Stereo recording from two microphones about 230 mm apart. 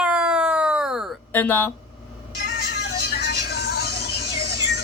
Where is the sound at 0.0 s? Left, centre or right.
Centre.